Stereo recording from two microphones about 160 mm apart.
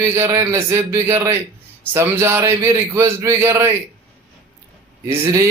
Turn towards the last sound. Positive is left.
turn(degrees=-20)  # may be behind; listen again after turning